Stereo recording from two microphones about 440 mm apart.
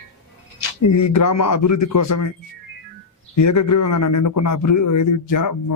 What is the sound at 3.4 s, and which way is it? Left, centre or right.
A man's voice, left.